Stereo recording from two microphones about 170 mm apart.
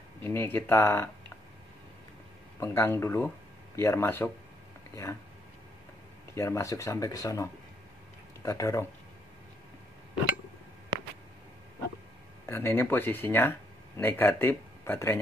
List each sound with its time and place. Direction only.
0.2 s speech: 15° left (ahead or behind)
2.6 s speech: 15° left (ahead or behind)
6.3 s speech: 15° left (ahead or behind)
12.4 s speech: 15° left (ahead or behind)